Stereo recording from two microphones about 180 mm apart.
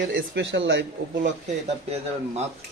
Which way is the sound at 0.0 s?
70° right (ahead or behind).